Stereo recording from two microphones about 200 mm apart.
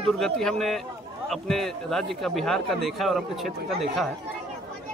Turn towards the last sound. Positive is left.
turn(degrees=0)  # may be behind; listen again after turning